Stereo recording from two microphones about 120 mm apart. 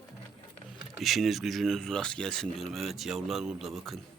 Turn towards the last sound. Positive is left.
turn(degrees=0)  # may be behind; listen again after turning